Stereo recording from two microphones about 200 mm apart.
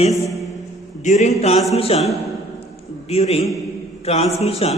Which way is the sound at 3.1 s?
30° left (ahead or behind).